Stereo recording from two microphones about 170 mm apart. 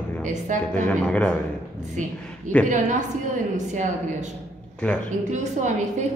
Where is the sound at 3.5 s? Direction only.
45° right (ahead or behind).